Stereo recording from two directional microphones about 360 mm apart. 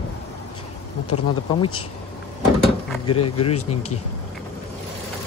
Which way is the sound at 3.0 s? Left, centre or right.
Left.